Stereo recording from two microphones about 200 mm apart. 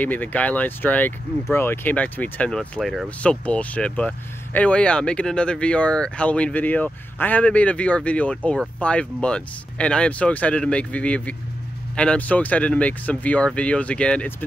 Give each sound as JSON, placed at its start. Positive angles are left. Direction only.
{"t": 0.0, "sound": "speech", "side_deg": 10}